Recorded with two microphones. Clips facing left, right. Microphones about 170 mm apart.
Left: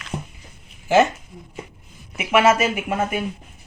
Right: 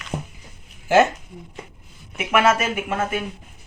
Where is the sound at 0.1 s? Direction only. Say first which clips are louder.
Right 1 dB; 15° right (ahead or behind).